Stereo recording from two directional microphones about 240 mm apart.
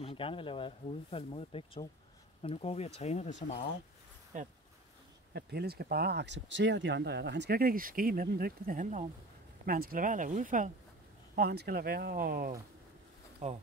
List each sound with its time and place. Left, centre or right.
0.0 s speech: left
4.3 s speech: right